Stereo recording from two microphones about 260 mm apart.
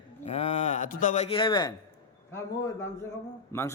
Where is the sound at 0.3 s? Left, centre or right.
Left.